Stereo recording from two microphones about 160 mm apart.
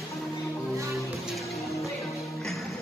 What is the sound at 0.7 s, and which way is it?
Music, 20° right (ahead or behind).